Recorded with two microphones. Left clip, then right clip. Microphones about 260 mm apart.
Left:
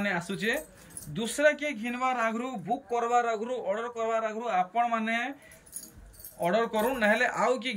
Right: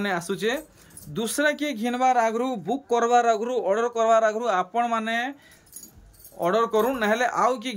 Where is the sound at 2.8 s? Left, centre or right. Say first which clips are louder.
Right 8 dB; right.